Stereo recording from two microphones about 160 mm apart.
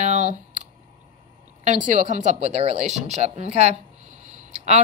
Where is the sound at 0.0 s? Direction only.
50° right (ahead or behind).